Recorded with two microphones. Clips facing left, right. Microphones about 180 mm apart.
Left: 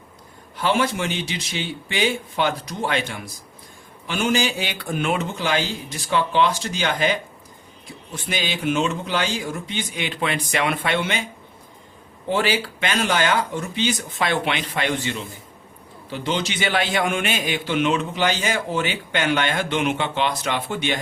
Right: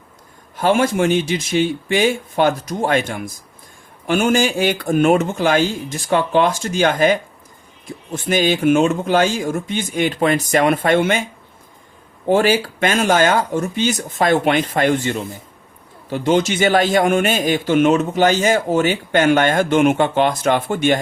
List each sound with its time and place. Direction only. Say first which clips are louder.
0.5 s a man's voice: right 6 dB; 45° right (ahead or behind)
12.3 s a man's voice: right 7 dB; 45° right (ahead or behind)